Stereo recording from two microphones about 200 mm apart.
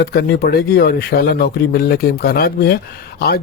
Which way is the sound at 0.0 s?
55° left (ahead or behind).